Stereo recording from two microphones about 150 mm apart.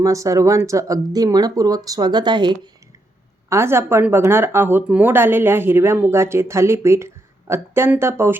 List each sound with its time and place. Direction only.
0.0 s speech: 20° right (ahead or behind)
3.5 s speech: 15° right (ahead or behind)